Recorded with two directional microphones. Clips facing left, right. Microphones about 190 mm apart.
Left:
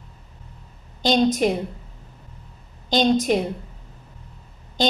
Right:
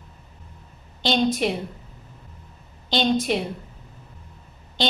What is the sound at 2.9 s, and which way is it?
Speech, 45° left (ahead or behind).